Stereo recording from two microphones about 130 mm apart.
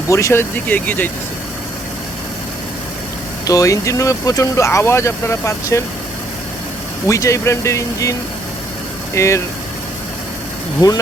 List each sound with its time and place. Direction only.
0.1 s speech: 20° left (ahead or behind)
3.4 s speech: 25° left (ahead or behind)
7.1 s speech: 25° left (ahead or behind)
9.1 s speech: 25° left (ahead or behind)
10.8 s speech: 25° left (ahead or behind)